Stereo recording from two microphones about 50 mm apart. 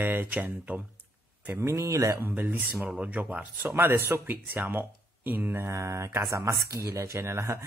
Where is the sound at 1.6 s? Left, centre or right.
Right.